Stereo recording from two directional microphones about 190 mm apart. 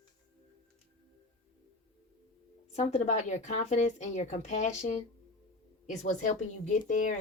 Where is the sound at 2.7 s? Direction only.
35° left (ahead or behind).